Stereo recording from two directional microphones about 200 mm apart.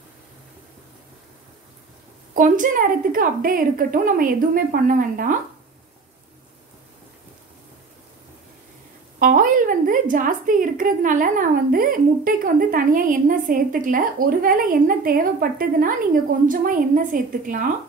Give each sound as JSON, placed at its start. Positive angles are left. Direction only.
{"t": 2.3, "sound": "a woman's voice", "side_deg": -40}
{"t": 9.2, "sound": "a woman's voice", "side_deg": -45}